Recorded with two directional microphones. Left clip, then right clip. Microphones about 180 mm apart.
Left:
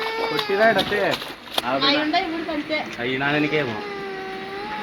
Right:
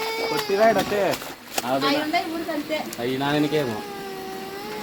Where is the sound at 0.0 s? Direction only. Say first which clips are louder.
Left 1 dB; 15° right (ahead or behind).